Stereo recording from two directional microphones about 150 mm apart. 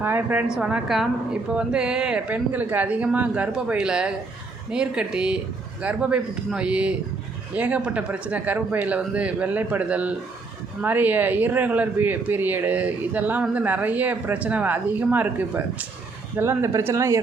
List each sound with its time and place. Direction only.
0.0 s speech: 10° right (ahead or behind)